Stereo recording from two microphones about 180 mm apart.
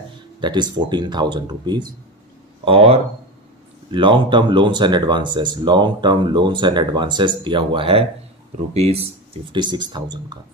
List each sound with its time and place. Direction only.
0.4 s speech: 25° right (ahead or behind)